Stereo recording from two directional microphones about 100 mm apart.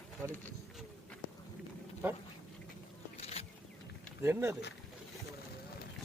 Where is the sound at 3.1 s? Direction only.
90° left.